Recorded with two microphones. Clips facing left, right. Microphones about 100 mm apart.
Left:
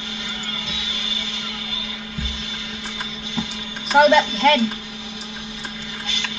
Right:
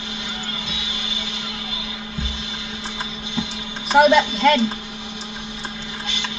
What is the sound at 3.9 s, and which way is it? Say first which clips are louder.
Speech: even; 5° right (ahead or behind).